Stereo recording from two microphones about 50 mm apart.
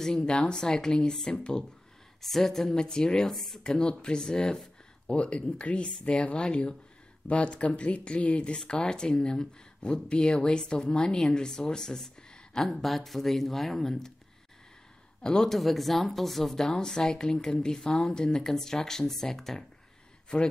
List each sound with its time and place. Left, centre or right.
0.0 s speech: centre
2.2 s speech: centre
3.3 s speech: centre
3.6 s speech: centre
15.2 s speech: centre